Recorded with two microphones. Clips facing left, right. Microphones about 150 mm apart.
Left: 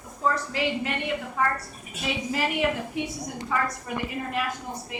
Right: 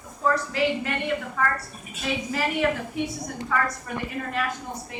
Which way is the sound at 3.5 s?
15° left (ahead or behind).